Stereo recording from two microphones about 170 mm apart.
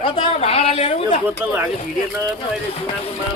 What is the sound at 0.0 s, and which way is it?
Speech, 35° left (ahead or behind).